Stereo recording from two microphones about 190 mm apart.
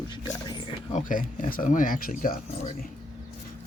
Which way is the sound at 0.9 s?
40° left (ahead or behind).